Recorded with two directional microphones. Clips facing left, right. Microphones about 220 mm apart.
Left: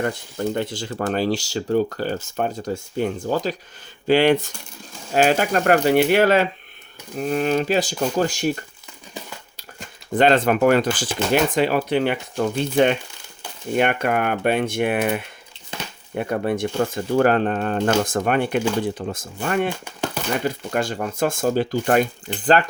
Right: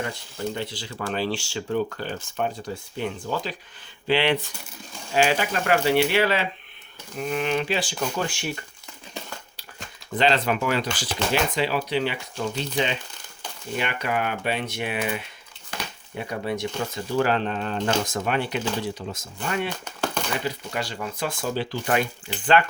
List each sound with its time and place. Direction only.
0.0 s speech: 50° left (ahead or behind)
10.2 s speech: 50° left (ahead or behind)
19.7 s speech: 10° left (ahead or behind)
20.4 s speech: 50° left (ahead or behind)